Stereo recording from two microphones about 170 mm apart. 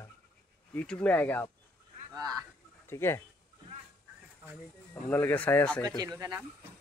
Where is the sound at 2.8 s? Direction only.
15° left (ahead or behind).